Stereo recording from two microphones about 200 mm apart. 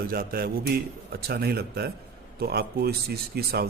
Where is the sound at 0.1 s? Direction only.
50° right (ahead or behind).